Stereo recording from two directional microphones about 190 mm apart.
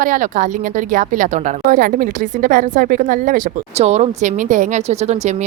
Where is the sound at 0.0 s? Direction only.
45° right (ahead or behind).